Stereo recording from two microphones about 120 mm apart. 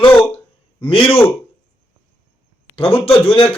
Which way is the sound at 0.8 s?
50° left (ahead or behind).